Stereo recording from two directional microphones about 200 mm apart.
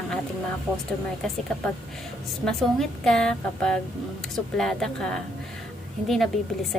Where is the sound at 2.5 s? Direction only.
5° left (ahead or behind).